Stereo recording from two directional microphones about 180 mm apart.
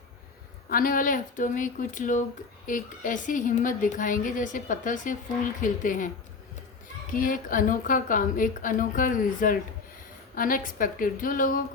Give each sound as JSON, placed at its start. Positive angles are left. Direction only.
{"t": 0.7, "sound": "a woman's voice", "side_deg": 50}
{"t": 7.1, "sound": "a woman's voice", "side_deg": 50}